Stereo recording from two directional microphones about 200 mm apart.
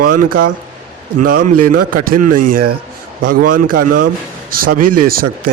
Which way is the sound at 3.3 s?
45° right (ahead or behind).